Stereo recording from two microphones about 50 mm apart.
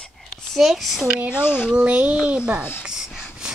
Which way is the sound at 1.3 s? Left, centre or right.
Left.